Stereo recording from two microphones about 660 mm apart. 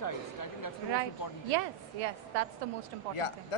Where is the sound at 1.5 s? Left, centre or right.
Right.